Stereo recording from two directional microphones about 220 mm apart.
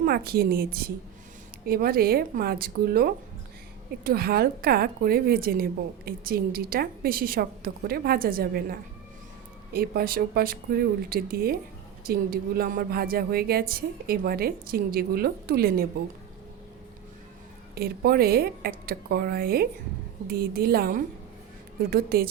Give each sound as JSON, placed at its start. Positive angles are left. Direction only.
{"t": 0.0, "sound": "a woman's voice", "side_deg": -45}
{"t": 17.7, "sound": "a woman's voice", "side_deg": -45}